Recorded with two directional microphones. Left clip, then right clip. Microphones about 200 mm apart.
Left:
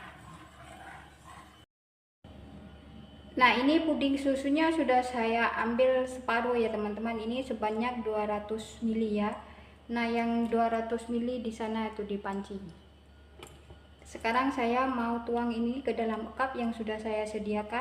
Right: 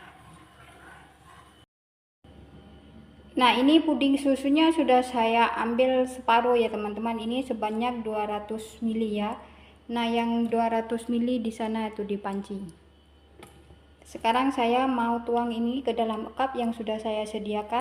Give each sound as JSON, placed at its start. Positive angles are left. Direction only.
{"t": 3.3, "sound": "a woman's voice", "side_deg": -35}
{"t": 14.1, "sound": "a woman's voice", "side_deg": -25}